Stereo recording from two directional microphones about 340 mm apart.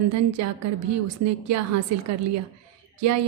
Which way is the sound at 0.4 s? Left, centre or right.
Right.